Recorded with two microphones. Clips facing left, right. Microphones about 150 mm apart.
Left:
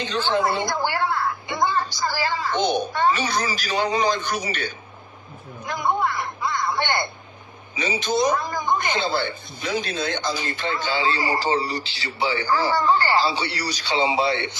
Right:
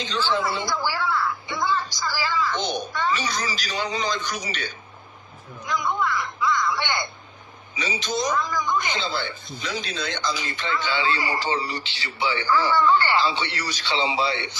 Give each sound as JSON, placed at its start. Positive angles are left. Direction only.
{"t": 0.0, "sound": "a man's voice", "side_deg": 55}
{"t": 14.2, "sound": "a man's voice", "side_deg": 50}